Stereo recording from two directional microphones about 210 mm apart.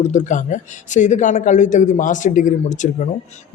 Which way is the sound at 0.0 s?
35° left (ahead or behind).